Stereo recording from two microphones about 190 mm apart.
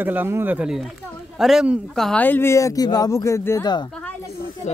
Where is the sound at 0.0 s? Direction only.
10° right (ahead or behind); by 3.8 s 20° left (ahead or behind).